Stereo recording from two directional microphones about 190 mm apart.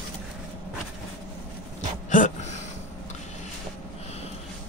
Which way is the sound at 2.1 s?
40° left (ahead or behind).